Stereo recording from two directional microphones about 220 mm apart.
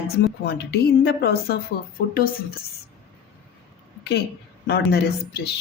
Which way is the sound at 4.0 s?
50° left (ahead or behind).